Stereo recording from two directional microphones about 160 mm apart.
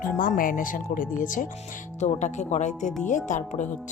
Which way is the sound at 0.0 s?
60° left (ahead or behind).